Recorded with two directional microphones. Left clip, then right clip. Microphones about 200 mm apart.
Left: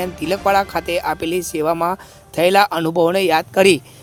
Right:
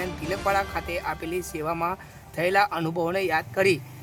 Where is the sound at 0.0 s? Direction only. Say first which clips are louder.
Left 8 dB; 35° left (ahead or behind).